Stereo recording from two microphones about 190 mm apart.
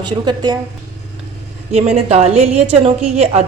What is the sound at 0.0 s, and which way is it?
Speech, 20° right (ahead or behind).